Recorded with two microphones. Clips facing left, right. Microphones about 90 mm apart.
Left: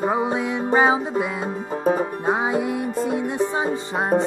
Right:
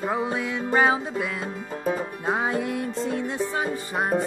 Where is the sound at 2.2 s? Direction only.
20° left (ahead or behind).